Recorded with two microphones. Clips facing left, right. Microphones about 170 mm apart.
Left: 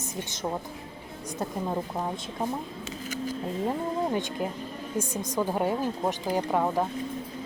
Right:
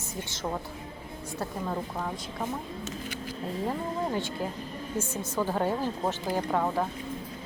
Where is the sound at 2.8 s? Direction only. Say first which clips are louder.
Left 3 dB; 40° left (ahead or behind).